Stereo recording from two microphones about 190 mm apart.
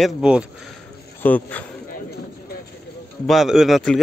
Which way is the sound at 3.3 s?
Centre (ahead or behind).